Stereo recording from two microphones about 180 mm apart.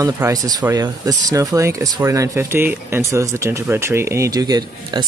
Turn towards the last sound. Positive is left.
turn(degrees=-20)  # may be behind; listen again after turning